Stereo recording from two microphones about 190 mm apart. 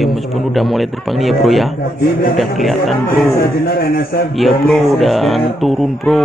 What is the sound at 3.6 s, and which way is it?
Speech, 55° left (ahead or behind).